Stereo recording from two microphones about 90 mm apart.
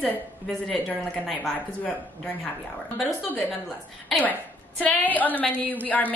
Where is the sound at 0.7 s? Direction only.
Centre (ahead or behind).